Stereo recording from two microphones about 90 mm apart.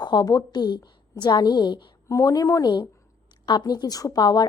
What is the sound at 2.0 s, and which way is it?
Speech, 40° left (ahead or behind).